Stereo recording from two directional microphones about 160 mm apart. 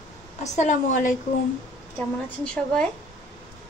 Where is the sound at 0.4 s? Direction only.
50° left (ahead or behind).